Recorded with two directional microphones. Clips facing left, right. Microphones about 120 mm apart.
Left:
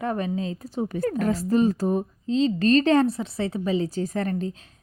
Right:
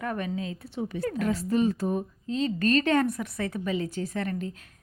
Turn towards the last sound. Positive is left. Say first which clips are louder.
# left 4 dB
turn(degrees=35)  # may be behind; listen again after turning